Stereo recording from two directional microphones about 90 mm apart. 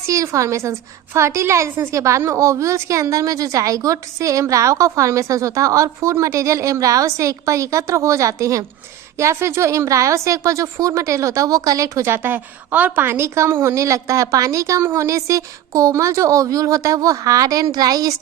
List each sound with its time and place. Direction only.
0.1 s a woman's voice: 35° right (ahead or behind)